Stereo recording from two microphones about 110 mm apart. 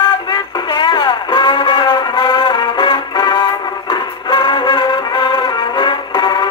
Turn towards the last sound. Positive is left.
turn(degrees=40)  # may be behind; listen again after turning